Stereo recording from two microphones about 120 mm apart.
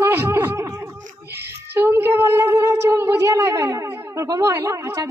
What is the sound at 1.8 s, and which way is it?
Speech, 20° right (ahead or behind).